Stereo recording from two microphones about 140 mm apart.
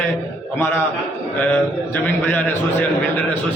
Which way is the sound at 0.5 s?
15° left (ahead or behind).